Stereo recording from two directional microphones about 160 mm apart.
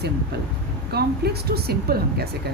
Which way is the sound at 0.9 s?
85° right.